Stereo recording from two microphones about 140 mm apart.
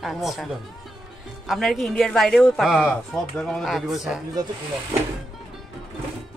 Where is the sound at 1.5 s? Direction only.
Centre (ahead or behind).